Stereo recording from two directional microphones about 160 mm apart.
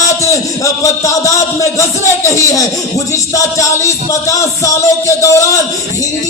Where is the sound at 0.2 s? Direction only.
20° left (ahead or behind).